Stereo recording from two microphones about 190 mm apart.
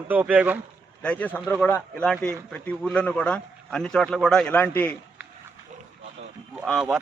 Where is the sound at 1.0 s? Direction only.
5° left (ahead or behind).